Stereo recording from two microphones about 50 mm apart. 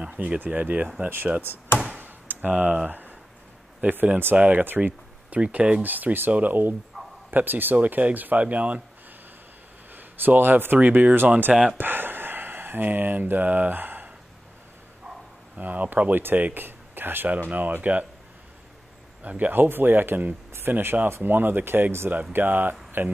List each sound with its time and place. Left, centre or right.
0.0 s speech: right
2.0 s a sound: right
2.5 s speech: right
5.8 s speech: right
9.9 s speech: right
11.5 s speech: centre
11.8 s a sound: right
15.5 s speech: right
19.2 s speech: right